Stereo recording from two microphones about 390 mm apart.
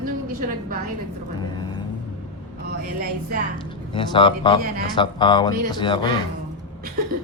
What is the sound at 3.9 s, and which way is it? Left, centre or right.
Speech, centre.